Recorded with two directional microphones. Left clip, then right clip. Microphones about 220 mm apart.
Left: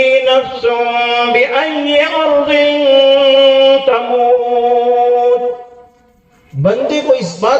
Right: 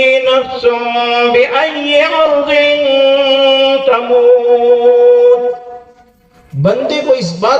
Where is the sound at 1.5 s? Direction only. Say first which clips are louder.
Right 1 dB; 45° right (ahead or behind).